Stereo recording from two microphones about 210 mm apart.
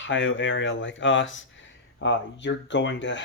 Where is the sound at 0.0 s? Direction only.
60° left (ahead or behind).